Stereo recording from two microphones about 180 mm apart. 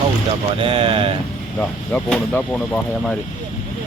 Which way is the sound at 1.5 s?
10° left (ahead or behind).